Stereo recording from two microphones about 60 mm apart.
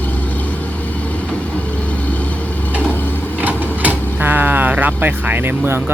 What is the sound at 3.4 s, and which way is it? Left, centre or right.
Speech, right.